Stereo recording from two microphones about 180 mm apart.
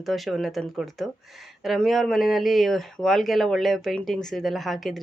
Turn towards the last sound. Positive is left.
turn(degrees=0)  # may be behind; listen again after turning